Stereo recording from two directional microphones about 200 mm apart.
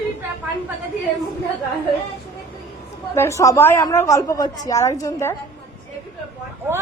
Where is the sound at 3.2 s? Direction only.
15° left (ahead or behind).